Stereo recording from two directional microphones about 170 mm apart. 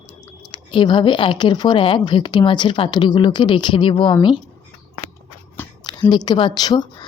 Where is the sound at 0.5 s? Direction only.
30° left (ahead or behind).